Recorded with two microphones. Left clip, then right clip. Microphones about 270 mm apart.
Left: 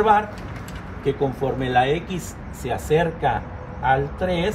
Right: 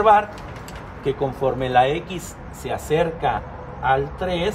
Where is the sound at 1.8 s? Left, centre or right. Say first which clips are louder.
Even; centre.